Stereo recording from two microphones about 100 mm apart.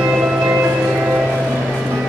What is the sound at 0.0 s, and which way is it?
Music, 10° right (ahead or behind).